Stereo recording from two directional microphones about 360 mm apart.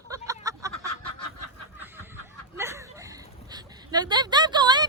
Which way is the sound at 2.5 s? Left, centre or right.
Centre.